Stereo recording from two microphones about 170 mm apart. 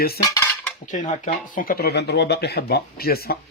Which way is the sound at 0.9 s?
45° left (ahead or behind).